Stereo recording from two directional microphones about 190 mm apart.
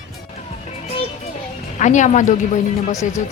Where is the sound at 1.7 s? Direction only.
40° left (ahead or behind).